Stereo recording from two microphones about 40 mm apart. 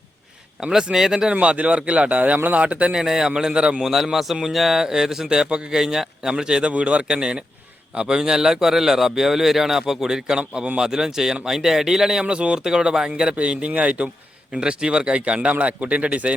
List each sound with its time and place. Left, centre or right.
0.6 s a man's voice: centre
1.3 s a man's voice: right
2.9 s a man's voice: centre
3.8 s a man's voice: centre
5.3 s speech: right
5.7 s a man's voice: centre
6.7 s a man's voice: right; by 12.2 s centre
12.2 s speech: right
13.3 s a man's voice: right
14.5 s speech: right